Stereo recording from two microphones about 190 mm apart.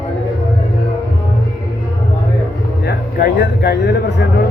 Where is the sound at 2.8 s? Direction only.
55° left (ahead or behind).